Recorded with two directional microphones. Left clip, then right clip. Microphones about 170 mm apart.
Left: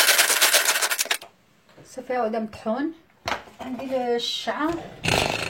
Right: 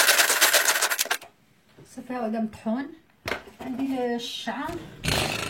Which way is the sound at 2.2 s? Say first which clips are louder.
Left 4 dB; 25° left (ahead or behind).